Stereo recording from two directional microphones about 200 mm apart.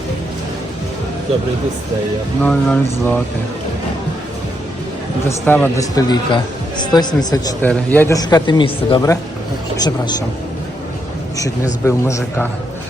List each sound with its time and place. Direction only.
2.4 s speech: 5° left (ahead or behind)
5.5 s speech: 15° left (ahead or behind)
7.6 s speech: 10° left (ahead or behind)
11.3 s speech: 15° left (ahead or behind)